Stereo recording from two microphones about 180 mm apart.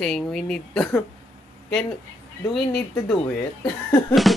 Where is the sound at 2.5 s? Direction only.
Centre (ahead or behind).